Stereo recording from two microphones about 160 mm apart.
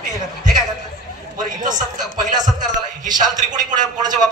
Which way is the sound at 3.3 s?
50° right (ahead or behind).